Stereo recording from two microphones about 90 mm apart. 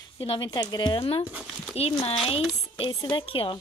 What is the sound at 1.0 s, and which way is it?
A woman's voice, 90° left.